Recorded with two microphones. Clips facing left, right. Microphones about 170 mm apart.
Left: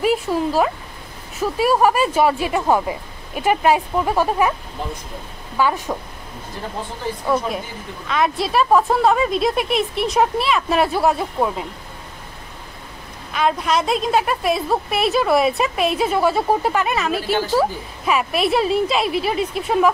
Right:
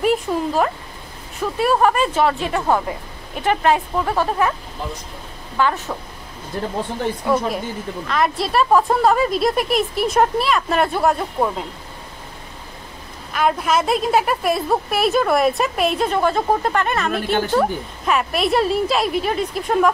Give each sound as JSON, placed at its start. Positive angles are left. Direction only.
{"t": 0.0, "sound": "a woman's voice", "side_deg": 5}
{"t": 5.6, "sound": "speech", "side_deg": 10}
{"t": 7.2, "sound": "a woman's voice", "side_deg": 0}
{"t": 13.3, "sound": "a woman's voice", "side_deg": 0}